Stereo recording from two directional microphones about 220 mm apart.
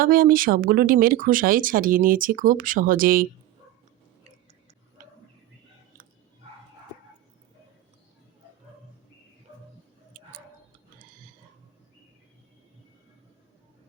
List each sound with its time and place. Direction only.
0.0 s speech: 40° right (ahead or behind)
5.0 s tick-tock: 35° right (ahead or behind)
10.1 s tick-tock: 40° right (ahead or behind)